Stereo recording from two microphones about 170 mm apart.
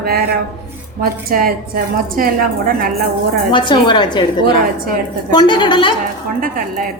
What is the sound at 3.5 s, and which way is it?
Speech, 25° left (ahead or behind).